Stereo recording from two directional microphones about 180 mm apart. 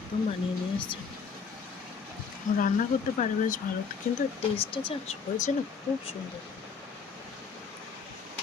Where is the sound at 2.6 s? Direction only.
45° left (ahead or behind).